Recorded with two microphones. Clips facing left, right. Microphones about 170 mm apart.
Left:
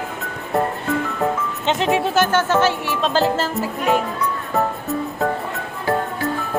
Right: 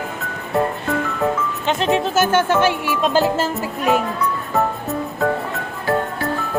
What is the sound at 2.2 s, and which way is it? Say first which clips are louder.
Speech: right 1 dB; 10° right (ahead or behind).